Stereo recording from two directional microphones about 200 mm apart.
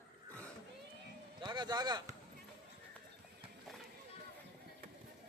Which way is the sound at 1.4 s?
20° right (ahead or behind).